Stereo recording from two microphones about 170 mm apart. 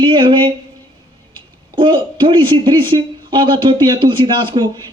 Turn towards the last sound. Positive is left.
turn(degrees=-30)  # may be behind; listen again after turning